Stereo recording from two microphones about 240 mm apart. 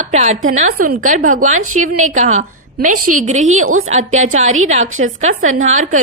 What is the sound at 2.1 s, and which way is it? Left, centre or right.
Speech, right.